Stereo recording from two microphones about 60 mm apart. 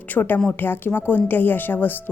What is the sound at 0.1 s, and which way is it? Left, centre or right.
A woman's voice, left.